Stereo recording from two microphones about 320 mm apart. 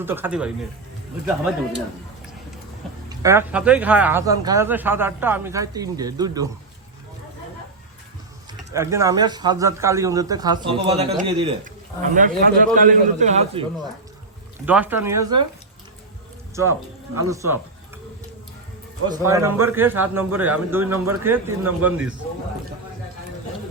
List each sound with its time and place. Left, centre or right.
0.0 s speech: centre
3.1 s speech: centre
8.7 s a man's voice: centre
14.7 s speech: centre
17.2 s speech: centre
19.0 s speech: centre